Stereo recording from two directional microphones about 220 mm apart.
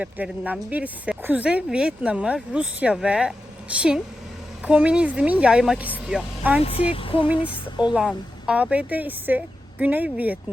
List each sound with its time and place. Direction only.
0.0 s speech: 5° right (ahead or behind)
6.6 s speech: 25° left (ahead or behind)
7.9 s speech: 5° right (ahead or behind)